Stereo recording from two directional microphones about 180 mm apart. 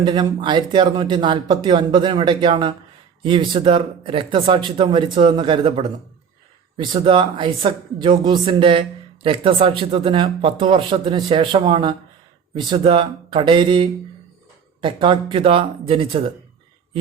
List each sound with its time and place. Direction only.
0.0 s speech: 25° right (ahead or behind)